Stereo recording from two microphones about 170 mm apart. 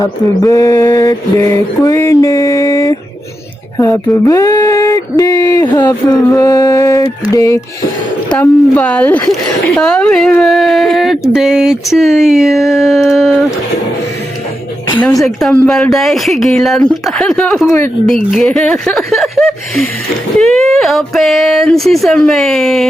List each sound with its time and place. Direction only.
0.0 s a sound: 20° left (ahead or behind)
8.4 s speech: 10° left (ahead or behind)
15.2 s speech: centre (ahead or behind)